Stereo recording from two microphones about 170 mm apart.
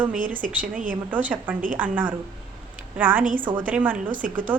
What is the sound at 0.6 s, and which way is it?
Speech, 50° right (ahead or behind).